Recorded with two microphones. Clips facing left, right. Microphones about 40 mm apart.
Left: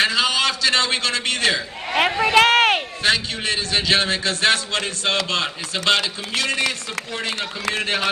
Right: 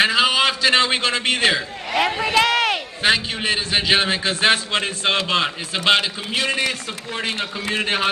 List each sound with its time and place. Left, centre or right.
0.0 s a sound: centre
1.9 s a man's voice: left
3.0 s a man's voice: centre
7.7 s speech: centre